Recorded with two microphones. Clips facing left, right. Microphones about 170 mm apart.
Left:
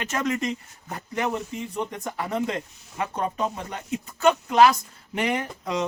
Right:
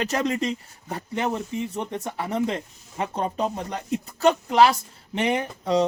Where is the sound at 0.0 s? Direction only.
35° right (ahead or behind).